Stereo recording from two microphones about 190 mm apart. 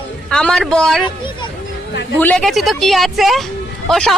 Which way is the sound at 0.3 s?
5° left (ahead or behind).